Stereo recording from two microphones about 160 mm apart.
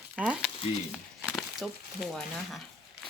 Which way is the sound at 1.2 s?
Centre (ahead or behind).